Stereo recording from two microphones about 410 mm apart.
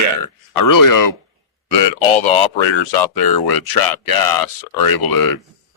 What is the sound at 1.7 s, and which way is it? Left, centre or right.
A man's voice, left.